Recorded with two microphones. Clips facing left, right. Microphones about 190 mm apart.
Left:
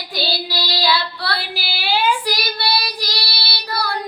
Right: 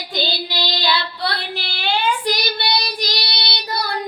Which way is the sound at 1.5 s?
5° left (ahead or behind).